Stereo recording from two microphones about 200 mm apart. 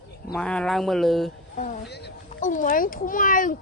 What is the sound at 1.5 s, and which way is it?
Speech, 45° left (ahead or behind).